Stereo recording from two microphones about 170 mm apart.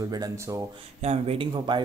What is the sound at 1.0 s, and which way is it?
Speech, 40° right (ahead or behind).